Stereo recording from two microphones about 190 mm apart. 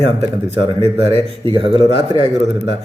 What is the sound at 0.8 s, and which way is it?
A man's voice, 30° right (ahead or behind).